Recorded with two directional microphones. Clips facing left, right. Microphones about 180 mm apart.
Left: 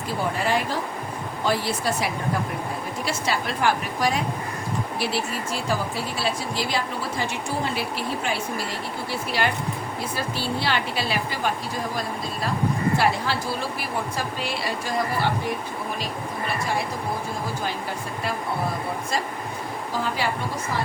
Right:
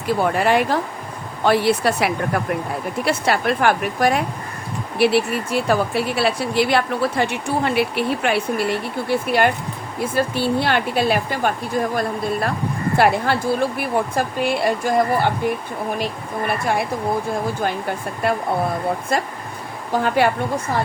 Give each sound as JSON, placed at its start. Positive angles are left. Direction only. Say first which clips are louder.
{"t": 0.2, "sound": "speech", "louder": "right 6 dB", "side_deg": -65}
{"t": 16.5, "sound": "speech", "louder": "right 6 dB", "side_deg": -60}